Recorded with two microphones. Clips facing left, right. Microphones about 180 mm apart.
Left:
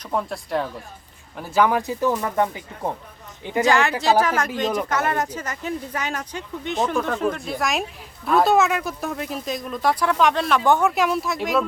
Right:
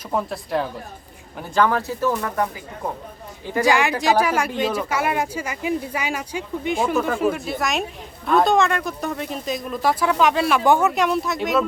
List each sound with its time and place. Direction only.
0.1 s speech: centre (ahead or behind)
1.4 s speech: 10° left (ahead or behind)
3.6 s speech: 15° right (ahead or behind)